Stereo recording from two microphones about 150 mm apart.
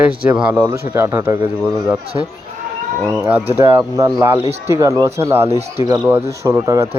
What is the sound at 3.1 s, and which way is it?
Speech, 10° right (ahead or behind).